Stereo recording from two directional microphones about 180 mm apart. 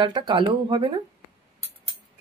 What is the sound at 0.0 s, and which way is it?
Speech, 25° right (ahead or behind).